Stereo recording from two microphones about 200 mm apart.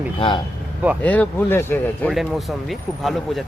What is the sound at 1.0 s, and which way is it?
Speech, 10° left (ahead or behind).